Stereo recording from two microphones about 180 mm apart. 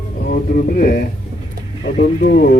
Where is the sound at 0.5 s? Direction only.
55° left (ahead or behind).